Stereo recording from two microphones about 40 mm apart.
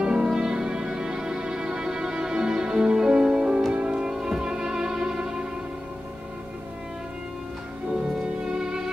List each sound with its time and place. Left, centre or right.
0.0 s music: centre
8.5 s music: centre